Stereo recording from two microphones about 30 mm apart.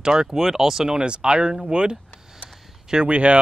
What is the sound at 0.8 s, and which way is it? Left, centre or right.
Speech, right.